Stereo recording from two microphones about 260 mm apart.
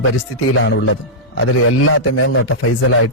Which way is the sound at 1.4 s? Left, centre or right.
Left.